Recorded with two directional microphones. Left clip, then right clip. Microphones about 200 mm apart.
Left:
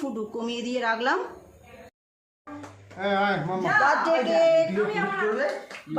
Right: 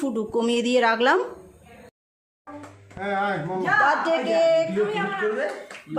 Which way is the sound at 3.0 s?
20° left (ahead or behind).